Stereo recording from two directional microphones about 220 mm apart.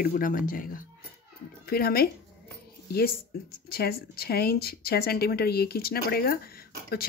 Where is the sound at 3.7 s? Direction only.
45° left (ahead or behind).